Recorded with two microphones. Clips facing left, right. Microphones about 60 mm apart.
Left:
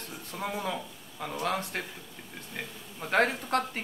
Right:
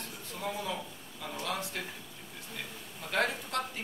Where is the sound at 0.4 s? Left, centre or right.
Left.